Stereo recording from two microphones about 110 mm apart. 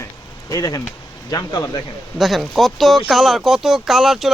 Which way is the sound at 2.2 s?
Centre (ahead or behind).